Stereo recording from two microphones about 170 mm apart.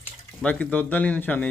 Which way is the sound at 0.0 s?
10° left (ahead or behind).